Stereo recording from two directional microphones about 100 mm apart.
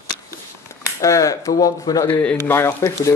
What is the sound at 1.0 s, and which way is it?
Speech, 35° left (ahead or behind).